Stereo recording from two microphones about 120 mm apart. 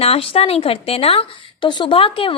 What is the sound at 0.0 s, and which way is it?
A woman's voice, 55° left (ahead or behind).